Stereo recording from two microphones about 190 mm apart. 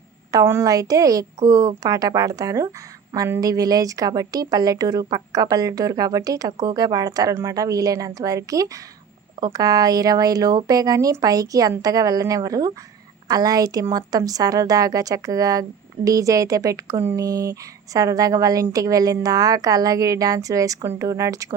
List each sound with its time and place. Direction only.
0.3 s speech: 15° right (ahead or behind)